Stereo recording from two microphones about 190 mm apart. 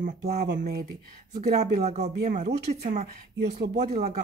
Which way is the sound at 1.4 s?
35° right (ahead or behind).